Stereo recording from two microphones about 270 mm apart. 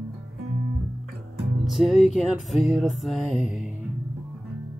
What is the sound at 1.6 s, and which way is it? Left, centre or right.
Music, centre.